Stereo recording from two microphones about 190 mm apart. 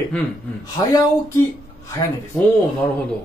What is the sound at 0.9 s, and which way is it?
Speech, 15° left (ahead or behind).